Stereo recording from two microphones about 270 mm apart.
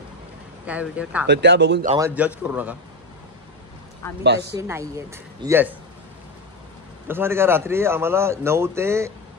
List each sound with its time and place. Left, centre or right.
0.7 s a man's voice: centre
1.2 s speech: right
2.0 s a man's voice: centre
4.0 s speech: centre
4.6 s a man's voice: centre
7.1 s a man's voice: centre